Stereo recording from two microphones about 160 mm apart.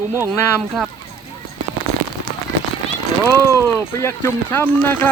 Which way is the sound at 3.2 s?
15° left (ahead or behind).